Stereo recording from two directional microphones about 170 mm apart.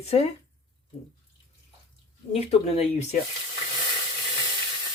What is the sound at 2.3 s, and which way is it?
Speech, 40° left (ahead or behind).